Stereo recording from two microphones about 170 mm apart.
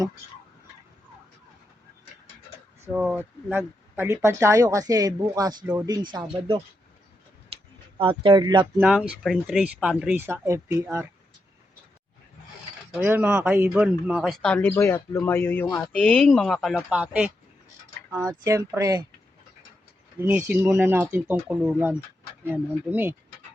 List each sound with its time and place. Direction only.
2.9 s speech: 5° right (ahead or behind); by 6.6 s 25° right (ahead or behind)
7.9 s speech: 30° right (ahead or behind)
8.8 s speech: 5° right (ahead or behind)
12.9 s speech: 10° right (ahead or behind)
20.1 s speech: 10° right (ahead or behind)